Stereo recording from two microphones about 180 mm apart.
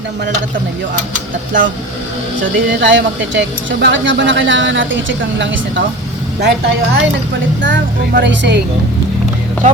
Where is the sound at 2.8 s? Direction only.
90° right.